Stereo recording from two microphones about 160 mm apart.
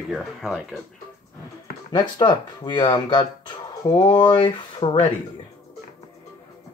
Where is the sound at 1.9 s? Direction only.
25° left (ahead or behind).